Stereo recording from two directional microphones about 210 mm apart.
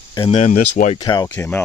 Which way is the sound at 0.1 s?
25° left (ahead or behind).